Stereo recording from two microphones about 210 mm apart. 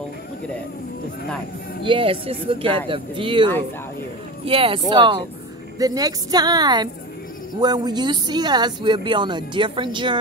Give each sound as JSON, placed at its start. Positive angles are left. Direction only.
{"t": 1.9, "sound": "speech", "side_deg": -25}
{"t": 4.5, "sound": "a woman's voice", "side_deg": -25}